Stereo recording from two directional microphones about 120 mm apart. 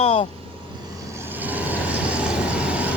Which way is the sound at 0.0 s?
60° left (ahead or behind).